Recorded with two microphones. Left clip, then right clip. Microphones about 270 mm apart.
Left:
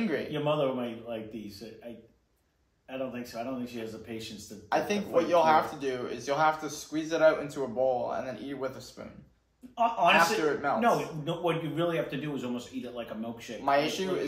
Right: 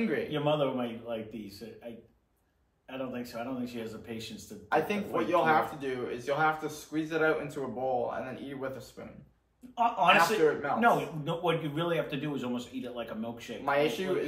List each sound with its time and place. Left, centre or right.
0.3 s speech: centre
2.9 s speech: centre